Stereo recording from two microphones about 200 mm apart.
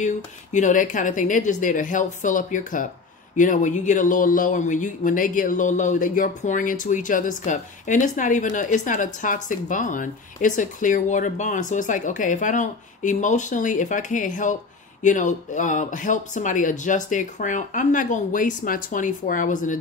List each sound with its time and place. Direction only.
0.0 s speech: 35° left (ahead or behind)